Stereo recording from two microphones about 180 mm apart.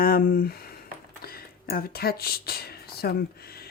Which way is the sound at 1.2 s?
55° left (ahead or behind).